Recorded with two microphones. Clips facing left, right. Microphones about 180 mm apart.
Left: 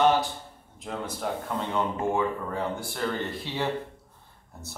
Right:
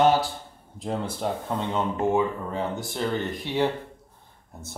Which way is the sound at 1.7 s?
20° right (ahead or behind).